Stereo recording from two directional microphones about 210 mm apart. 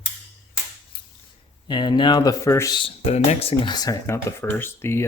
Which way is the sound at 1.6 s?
20° left (ahead or behind).